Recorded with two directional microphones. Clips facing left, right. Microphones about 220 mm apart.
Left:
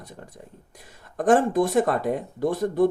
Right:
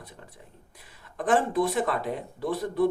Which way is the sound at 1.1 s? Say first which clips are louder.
Left 5 dB; 45° left (ahead or behind).